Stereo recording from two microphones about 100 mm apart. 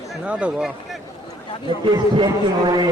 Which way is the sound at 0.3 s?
10° right (ahead or behind).